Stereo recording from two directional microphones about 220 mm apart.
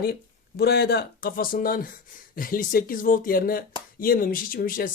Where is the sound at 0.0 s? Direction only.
45° left (ahead or behind).